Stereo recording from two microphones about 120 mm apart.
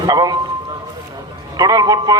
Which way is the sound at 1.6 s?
30° right (ahead or behind).